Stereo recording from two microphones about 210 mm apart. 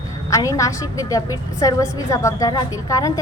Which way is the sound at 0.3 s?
15° left (ahead or behind).